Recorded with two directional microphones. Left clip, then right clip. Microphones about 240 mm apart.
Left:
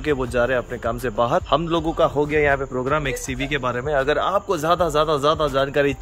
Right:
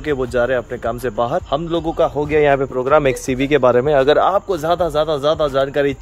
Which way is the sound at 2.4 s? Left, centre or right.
Right.